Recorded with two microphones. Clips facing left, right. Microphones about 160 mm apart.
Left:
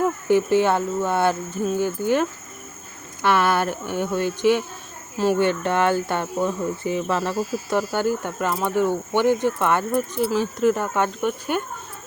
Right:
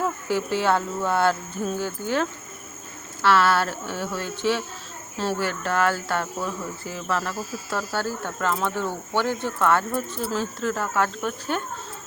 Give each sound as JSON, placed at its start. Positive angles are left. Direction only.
{"t": 0.0, "sound": "speech", "side_deg": 20}